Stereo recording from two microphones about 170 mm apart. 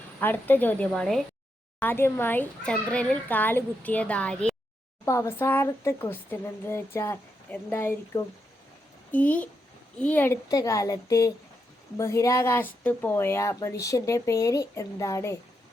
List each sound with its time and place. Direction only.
0.2 s a woman's voice: 10° left (ahead or behind)